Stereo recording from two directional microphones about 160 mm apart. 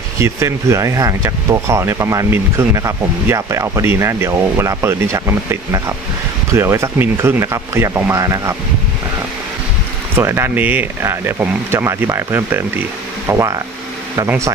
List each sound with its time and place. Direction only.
0.2 s speech: 20° right (ahead or behind)
10.1 s speech: 15° right (ahead or behind)